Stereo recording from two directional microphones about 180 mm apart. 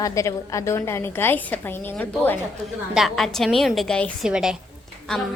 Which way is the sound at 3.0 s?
Centre (ahead or behind).